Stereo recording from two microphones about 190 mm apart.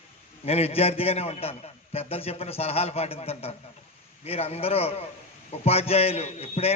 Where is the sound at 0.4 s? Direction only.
30° left (ahead or behind).